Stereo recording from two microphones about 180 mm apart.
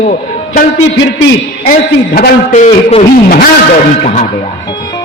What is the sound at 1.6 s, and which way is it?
Speech, 55° left (ahead or behind).